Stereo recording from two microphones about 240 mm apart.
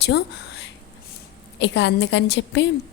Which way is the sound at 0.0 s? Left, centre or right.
Left.